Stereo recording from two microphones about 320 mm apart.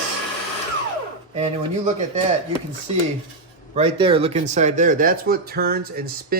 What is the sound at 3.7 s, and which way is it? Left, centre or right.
Speech, centre.